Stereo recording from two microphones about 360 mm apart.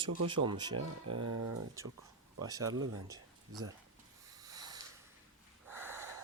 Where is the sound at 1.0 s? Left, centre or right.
Right.